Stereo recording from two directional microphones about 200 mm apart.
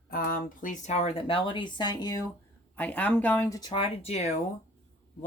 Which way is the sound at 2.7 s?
5° left (ahead or behind).